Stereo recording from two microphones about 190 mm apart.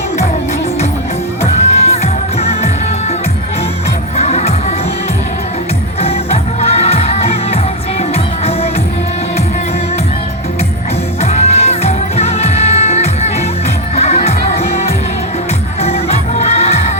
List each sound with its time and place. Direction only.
1.7 s music: 35° left (ahead or behind)
4.2 s music: 35° left (ahead or behind)
6.6 s music: 35° left (ahead or behind)
11.2 s music: 35° left (ahead or behind)